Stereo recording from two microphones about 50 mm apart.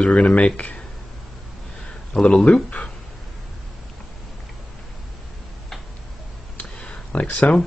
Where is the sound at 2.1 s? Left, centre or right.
Centre.